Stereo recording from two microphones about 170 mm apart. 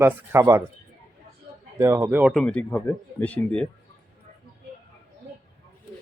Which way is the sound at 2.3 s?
5° left (ahead or behind).